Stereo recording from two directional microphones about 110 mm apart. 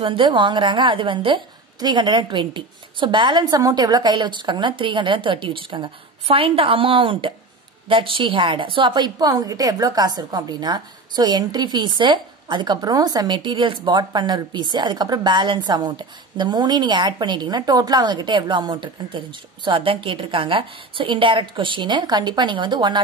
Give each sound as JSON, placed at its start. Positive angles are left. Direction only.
{"t": 0.0, "sound": "a woman's voice", "side_deg": -50}